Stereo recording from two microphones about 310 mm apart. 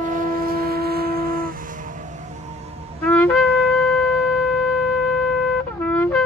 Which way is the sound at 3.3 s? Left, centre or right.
Centre.